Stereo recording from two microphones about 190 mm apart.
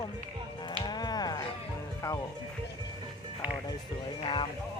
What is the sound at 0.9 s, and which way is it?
Music, 20° left (ahead or behind).